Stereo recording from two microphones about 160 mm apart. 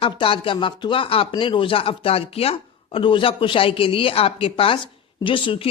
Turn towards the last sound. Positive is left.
turn(degrees=35)  # may be behind; listen again after turning